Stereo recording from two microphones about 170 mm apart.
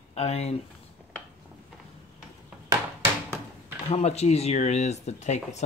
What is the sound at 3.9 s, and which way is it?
Speech, 40° left (ahead or behind).